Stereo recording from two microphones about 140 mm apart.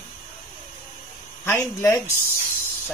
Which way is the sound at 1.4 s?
15° left (ahead or behind).